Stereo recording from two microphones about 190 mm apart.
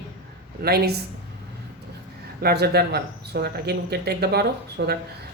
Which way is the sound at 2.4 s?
55° right (ahead or behind).